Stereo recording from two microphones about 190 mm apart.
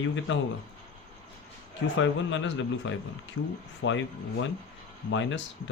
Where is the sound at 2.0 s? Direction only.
80° left.